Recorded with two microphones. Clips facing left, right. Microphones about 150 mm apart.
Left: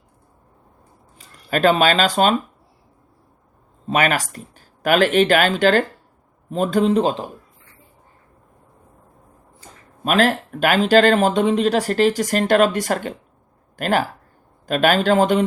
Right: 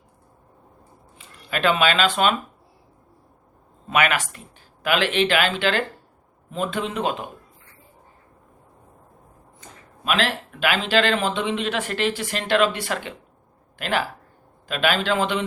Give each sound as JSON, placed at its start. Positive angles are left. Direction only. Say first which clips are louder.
{"t": 1.2, "sound": "speech", "louder": "left 6 dB", "side_deg": 40}
{"t": 3.8, "sound": "speech", "louder": "left 3 dB", "side_deg": 35}
{"t": 9.6, "sound": "speech", "louder": "left 5 dB", "side_deg": 45}